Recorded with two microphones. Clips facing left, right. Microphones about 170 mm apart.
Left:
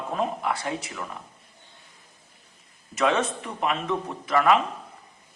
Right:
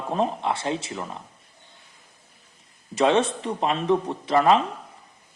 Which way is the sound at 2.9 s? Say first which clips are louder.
Right 4 dB; 30° right (ahead or behind).